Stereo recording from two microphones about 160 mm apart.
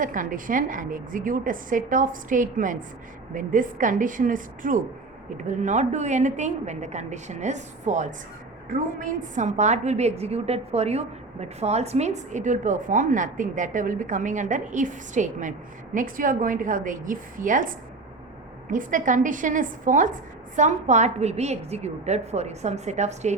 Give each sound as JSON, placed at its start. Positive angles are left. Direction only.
{"t": 0.0, "sound": "a woman's voice", "side_deg": -55}